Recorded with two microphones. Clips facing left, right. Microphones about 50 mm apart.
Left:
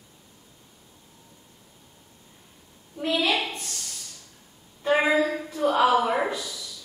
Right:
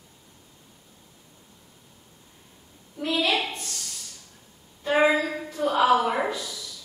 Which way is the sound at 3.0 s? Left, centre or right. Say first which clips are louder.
Left 1 dB; centre.